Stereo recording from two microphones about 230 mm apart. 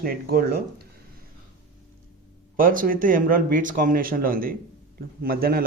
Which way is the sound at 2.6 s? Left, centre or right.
Right.